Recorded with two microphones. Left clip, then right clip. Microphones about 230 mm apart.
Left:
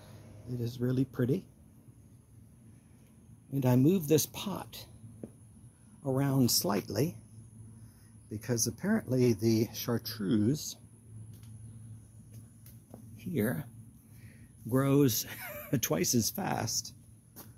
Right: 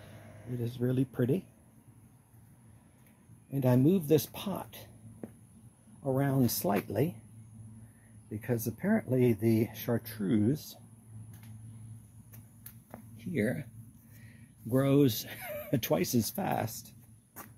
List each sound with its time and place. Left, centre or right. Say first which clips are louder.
0.6 s speech: right 1 dB; centre
3.5 s speech: even; centre
6.0 s speech: even; centre
8.3 s speech: left 1 dB; centre
13.2 s speech: right 1 dB; centre
14.7 s speech: right 1 dB; centre